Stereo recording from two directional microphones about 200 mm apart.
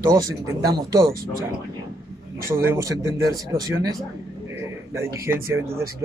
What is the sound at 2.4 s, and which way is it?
A man's voice, 10° right (ahead or behind).